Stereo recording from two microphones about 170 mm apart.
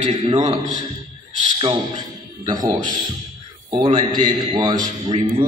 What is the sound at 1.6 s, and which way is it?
A man's voice, 25° right (ahead or behind).